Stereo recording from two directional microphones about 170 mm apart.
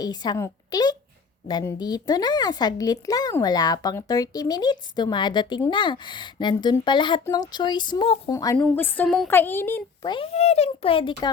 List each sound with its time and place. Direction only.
0.0 s a woman's voice: 25° left (ahead or behind)
8.3 s a child's voice: 20° left (ahead or behind)
10.1 s a child's voice: 35° left (ahead or behind)